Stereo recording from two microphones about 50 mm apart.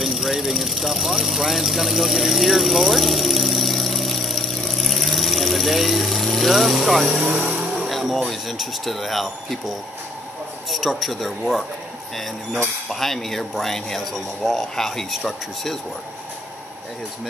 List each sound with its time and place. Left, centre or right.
0.0 s speech: centre
12.9 s speech: centre